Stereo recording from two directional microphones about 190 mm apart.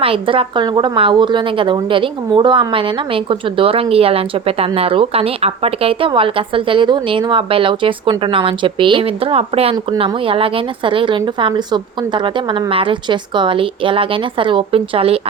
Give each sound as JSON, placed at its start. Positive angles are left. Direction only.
{"t": 0.0, "sound": "speech", "side_deg": -30}